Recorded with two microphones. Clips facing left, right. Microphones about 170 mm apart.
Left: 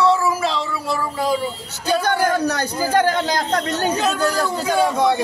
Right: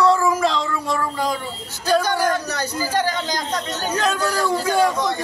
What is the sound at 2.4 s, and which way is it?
Speech, 60° left (ahead or behind).